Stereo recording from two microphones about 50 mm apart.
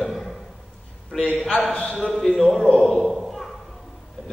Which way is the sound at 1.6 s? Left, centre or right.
Centre.